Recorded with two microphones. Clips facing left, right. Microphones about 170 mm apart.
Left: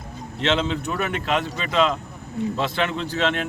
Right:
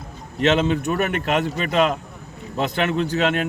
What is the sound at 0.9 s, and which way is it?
Speech, 60° right (ahead or behind).